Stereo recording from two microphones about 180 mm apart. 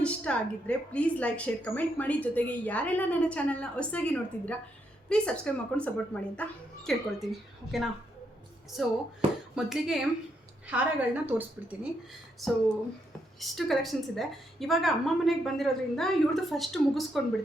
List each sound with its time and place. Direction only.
0.0 s a woman's voice: 5° left (ahead or behind)
9.2 s speech: 35° right (ahead or behind)
9.6 s a woman's voice: 5° right (ahead or behind)